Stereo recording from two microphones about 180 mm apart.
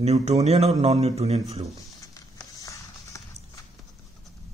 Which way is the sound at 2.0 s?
20° left (ahead or behind).